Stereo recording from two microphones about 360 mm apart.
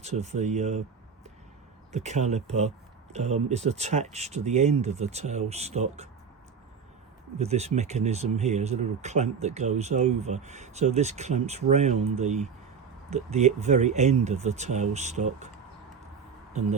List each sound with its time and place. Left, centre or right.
0.0 s speech: centre
1.9 s speech: centre
7.3 s speech: centre